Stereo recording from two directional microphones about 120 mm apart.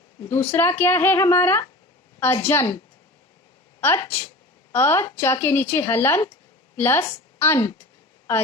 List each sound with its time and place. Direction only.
0.3 s speech: 20° left (ahead or behind)
3.8 s a woman's voice: 20° left (ahead or behind)